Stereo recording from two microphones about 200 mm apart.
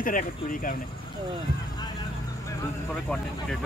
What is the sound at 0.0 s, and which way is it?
Speech, 40° left (ahead or behind).